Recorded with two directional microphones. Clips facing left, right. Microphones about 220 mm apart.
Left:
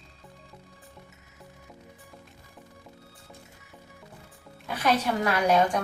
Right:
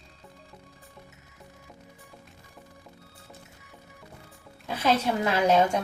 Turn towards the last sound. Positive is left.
turn(degrees=-25)  # may be behind; listen again after turning